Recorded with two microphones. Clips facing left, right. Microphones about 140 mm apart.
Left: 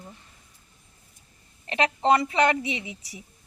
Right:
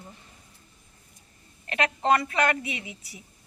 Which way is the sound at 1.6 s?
25° left (ahead or behind).